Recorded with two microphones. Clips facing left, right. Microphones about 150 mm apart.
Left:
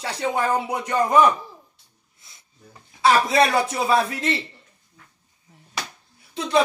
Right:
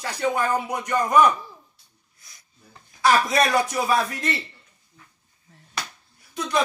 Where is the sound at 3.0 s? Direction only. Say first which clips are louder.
Left 2 dB; 25° left (ahead or behind).